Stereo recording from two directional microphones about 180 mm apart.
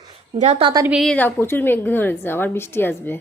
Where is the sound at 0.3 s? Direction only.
40° right (ahead or behind).